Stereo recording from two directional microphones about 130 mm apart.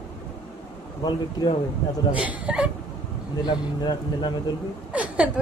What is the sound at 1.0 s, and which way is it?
Speech, 35° left (ahead or behind).